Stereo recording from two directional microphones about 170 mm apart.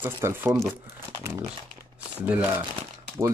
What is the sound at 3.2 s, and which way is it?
Speech, 20° right (ahead or behind).